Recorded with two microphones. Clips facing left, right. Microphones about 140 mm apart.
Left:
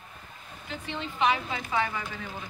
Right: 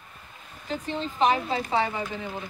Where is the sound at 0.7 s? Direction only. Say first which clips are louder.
Right 6 dB; 35° right (ahead or behind).